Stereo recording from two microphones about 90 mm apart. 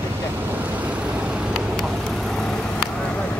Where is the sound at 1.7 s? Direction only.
5° left (ahead or behind).